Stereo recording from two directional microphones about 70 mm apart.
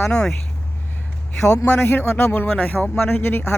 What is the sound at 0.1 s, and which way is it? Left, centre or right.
Speech, centre.